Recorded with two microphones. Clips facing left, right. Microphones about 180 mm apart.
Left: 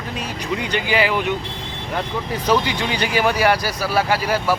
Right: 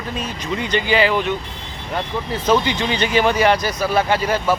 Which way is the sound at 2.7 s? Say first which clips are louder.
Right 2 dB; 10° left (ahead or behind).